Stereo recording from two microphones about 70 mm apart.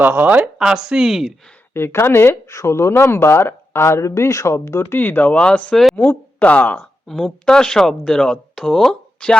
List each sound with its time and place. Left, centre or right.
0.0 s speech: right
0.6 s speech: centre
1.7 s speech: left
2.5 s speech: left
7.1 s speech: centre